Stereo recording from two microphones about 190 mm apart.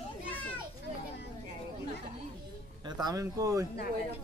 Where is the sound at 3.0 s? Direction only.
20° right (ahead or behind).